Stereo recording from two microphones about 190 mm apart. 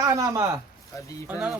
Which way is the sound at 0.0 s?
15° right (ahead or behind).